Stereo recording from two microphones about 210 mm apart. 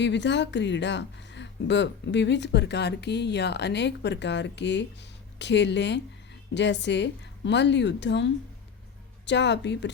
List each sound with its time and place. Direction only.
0.0 s speech: 55° left (ahead or behind)